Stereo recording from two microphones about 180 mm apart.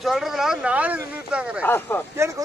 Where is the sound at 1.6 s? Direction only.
10° left (ahead or behind).